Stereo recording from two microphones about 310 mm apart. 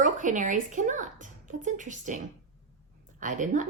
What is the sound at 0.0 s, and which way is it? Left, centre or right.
Speech, right.